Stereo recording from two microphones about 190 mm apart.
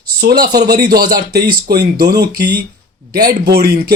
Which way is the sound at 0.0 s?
55° right (ahead or behind).